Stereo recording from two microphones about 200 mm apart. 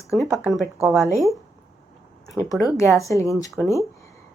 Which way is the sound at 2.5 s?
Centre (ahead or behind).